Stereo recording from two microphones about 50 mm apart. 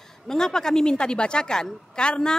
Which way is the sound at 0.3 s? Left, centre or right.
Centre.